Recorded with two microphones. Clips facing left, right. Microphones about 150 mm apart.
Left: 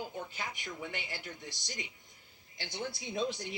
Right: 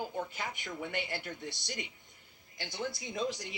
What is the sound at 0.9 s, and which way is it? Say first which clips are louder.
Speech: right 5 dB; 60° right (ahead or behind).